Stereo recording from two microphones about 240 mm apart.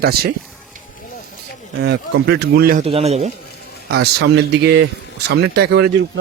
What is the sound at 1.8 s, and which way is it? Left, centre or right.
Speech, right.